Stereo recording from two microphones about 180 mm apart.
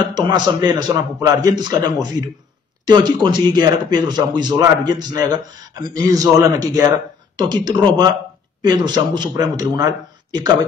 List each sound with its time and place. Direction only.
0.1 s speech: 20° right (ahead or behind)